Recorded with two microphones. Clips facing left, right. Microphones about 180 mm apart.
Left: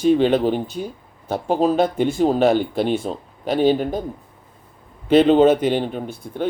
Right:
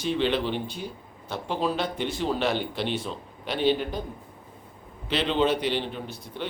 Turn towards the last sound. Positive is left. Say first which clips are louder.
# left 8 dB
turn(degrees=45)  # may be behind; listen again after turning